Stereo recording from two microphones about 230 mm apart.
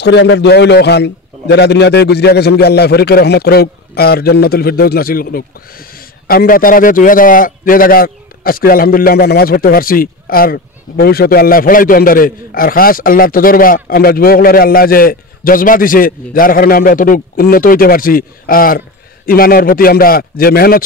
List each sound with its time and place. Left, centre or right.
0.0 s a man's voice: left